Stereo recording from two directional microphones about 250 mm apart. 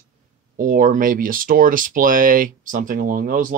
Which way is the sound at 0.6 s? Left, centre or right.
Right.